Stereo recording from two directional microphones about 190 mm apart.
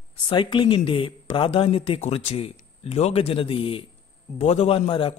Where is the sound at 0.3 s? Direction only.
25° left (ahead or behind).